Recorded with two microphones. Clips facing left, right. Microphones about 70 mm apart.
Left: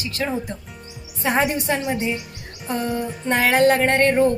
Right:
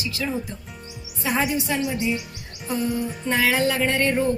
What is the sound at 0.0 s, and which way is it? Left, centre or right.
Music, left.